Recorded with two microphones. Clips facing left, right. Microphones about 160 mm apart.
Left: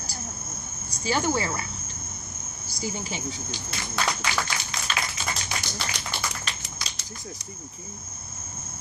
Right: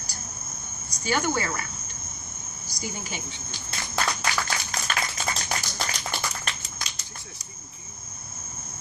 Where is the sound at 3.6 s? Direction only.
30° right (ahead or behind).